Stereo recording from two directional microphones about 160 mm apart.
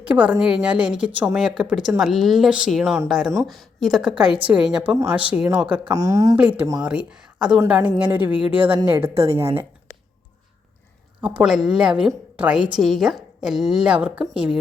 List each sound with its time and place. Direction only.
0.0 s a woman's voice: 10° right (ahead or behind)
4.9 s speech: 15° right (ahead or behind)
5.8 s a woman's voice: 20° right (ahead or behind)
6.8 s a woman's voice: 5° right (ahead or behind)
11.2 s a woman's voice: 5° right (ahead or behind)